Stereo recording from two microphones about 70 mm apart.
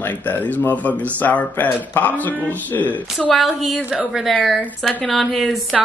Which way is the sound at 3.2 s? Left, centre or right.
Centre.